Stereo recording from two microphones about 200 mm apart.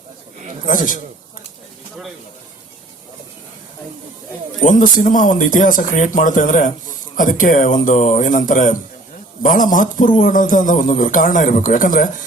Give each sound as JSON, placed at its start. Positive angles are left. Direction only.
{"t": 0.7, "sound": "speech", "side_deg": 40}
{"t": 4.6, "sound": "speech", "side_deg": 40}